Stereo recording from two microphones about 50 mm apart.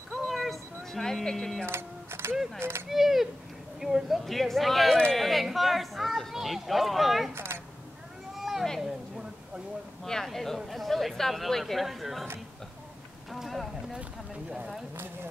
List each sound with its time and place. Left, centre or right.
0.1 s music: centre
1.7 s speech: right
2.9 s speech: centre
7.3 s a sound: right
8.4 s a sound: centre
10.0 s speech: centre
13.3 s speech: centre
13.9 s speech: centre